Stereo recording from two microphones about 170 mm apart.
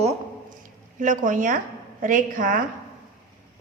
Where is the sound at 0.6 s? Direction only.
50° right (ahead or behind).